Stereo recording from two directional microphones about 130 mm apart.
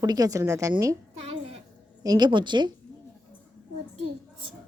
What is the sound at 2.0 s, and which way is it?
Speech, 30° right (ahead or behind).